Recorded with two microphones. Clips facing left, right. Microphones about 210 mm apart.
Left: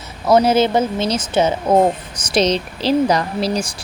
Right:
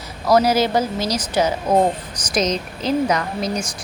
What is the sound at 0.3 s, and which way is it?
A woman's voice, 25° left (ahead or behind).